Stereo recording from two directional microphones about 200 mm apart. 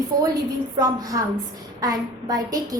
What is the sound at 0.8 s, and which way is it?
A woman's voice, 15° right (ahead or behind).